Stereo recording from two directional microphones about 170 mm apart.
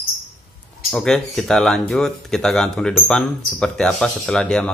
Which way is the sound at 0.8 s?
5° left (ahead or behind).